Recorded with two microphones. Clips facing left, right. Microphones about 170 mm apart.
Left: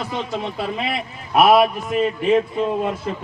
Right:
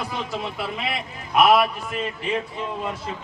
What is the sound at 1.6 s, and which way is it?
Speech, 45° left (ahead or behind).